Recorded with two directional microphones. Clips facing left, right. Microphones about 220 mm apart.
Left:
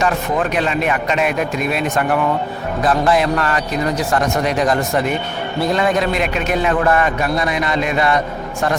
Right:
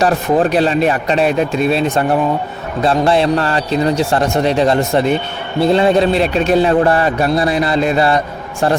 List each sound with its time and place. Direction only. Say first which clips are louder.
0.0 s a man's voice: right 5 dB; 35° right (ahead or behind)